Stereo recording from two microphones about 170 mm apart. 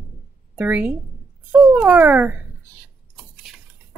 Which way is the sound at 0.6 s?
10° right (ahead or behind).